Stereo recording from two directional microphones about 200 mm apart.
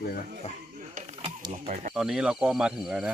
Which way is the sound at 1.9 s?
Centre (ahead or behind).